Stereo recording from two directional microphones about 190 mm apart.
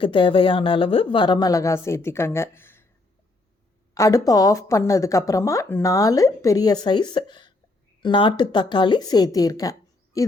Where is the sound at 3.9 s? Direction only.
15° left (ahead or behind).